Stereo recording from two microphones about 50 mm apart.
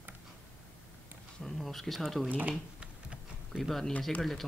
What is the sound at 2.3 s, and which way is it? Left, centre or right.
Speech, right.